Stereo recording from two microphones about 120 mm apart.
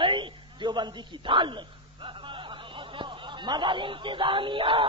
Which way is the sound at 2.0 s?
45° right (ahead or behind).